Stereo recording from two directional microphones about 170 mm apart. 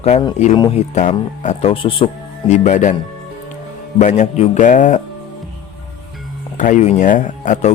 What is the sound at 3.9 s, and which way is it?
Speech, 45° left (ahead or behind).